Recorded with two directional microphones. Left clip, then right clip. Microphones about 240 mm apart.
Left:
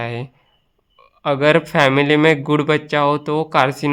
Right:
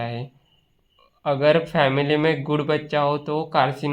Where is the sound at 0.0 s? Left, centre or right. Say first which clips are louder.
Left 4 dB; left.